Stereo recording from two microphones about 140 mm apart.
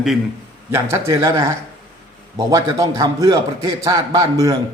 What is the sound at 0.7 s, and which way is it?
A man's voice, 20° right (ahead or behind).